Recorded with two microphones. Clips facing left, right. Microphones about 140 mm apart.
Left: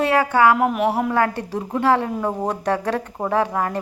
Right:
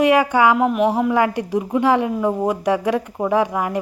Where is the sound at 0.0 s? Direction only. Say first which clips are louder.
Right 2 dB; 15° right (ahead or behind).